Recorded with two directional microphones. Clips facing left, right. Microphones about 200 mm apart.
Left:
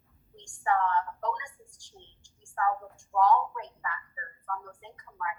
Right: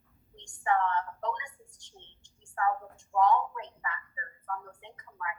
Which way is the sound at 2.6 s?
20° right (ahead or behind).